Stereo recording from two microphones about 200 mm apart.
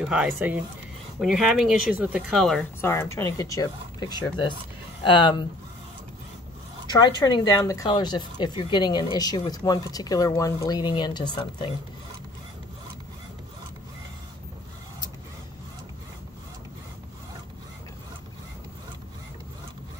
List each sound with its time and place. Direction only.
0.0 s speech: 5° right (ahead or behind)
2.8 s speech: 15° left (ahead or behind)
6.9 s speech: 20° left (ahead or behind)